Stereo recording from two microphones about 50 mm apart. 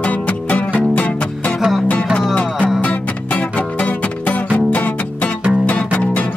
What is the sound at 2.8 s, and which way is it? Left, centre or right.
Music, left.